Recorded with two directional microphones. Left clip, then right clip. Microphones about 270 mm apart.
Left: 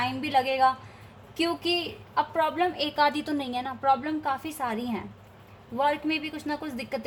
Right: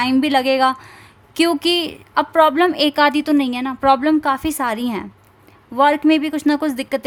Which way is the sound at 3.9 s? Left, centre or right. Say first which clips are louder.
Right 11 dB; right.